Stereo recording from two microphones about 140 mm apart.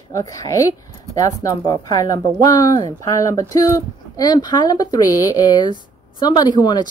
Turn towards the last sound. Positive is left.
turn(degrees=30)  # may be behind; listen again after turning